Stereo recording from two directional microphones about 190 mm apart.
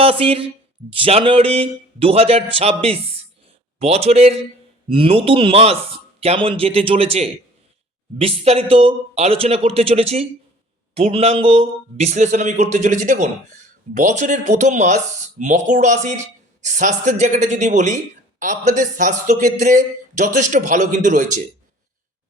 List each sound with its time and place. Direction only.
0.0 s a man's voice: 30° right (ahead or behind)